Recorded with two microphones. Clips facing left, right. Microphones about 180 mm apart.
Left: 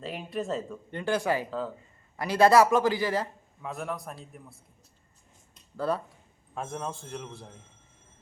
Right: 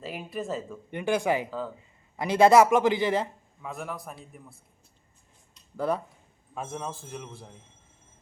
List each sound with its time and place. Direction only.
0.0 s a man's voice: centre (ahead or behind)
0.9 s speech: 15° right (ahead or behind)
1.5 s a man's voice: centre (ahead or behind)
2.1 s a man's voice: 20° right (ahead or behind)
3.6 s a man's voice: centre (ahead or behind)
5.7 s speech: 15° right (ahead or behind)
6.5 s a man's voice: centre (ahead or behind)